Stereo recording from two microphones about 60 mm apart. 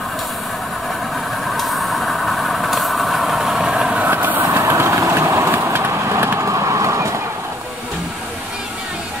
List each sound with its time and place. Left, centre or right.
1.5 s vehicle: centre
4.1 s vehicle: right
4.5 s vehicle: right
5.5 s vehicle: right